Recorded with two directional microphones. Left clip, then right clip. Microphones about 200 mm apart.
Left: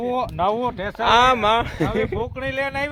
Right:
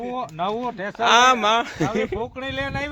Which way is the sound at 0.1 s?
45° left (ahead or behind).